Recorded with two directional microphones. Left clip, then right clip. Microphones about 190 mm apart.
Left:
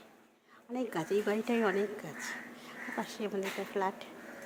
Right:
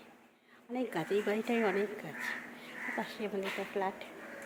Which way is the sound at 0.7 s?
10° left (ahead or behind).